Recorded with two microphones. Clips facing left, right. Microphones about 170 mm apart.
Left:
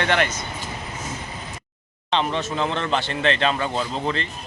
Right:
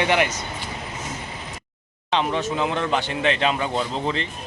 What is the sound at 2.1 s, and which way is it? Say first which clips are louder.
Speech: right 1 dB; 10° right (ahead or behind).